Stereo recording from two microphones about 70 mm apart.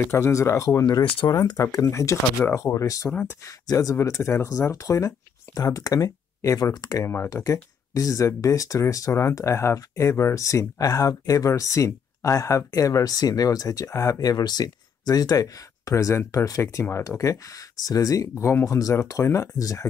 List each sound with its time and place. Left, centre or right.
0.0 s speech: left
1.2 s speech: left
6.6 s speech: left
18.3 s speech: left
18.7 s speech: left